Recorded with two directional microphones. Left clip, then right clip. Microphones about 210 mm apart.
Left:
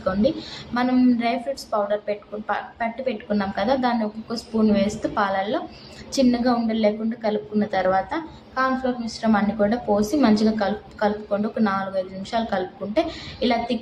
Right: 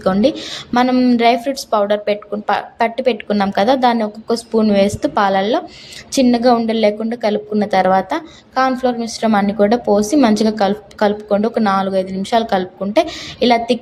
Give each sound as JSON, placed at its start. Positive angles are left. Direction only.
{"t": 0.0, "sound": "a woman's voice", "side_deg": -45}